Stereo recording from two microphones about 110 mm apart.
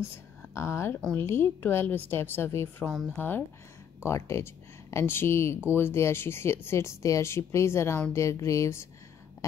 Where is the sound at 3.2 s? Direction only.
15° left (ahead or behind).